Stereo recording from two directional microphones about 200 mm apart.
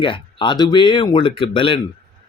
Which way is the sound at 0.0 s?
25° left (ahead or behind).